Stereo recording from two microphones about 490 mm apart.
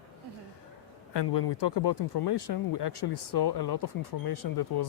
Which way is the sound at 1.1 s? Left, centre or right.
Left.